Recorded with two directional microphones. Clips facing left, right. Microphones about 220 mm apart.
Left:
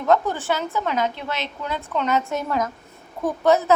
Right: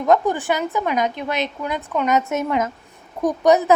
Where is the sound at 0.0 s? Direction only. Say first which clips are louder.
Right 3 dB; 15° right (ahead or behind).